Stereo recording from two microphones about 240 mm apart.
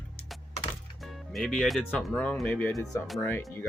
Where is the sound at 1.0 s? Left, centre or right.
Centre.